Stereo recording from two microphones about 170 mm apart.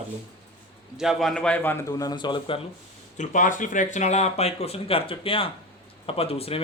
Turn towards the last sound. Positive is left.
turn(degrees=35)  # may be behind; listen again after turning